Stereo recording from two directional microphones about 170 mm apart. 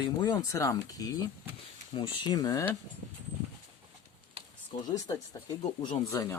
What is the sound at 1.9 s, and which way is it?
Speech, 30° left (ahead or behind).